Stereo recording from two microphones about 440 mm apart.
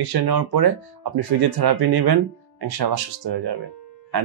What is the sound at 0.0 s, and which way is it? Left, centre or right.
Speech, right.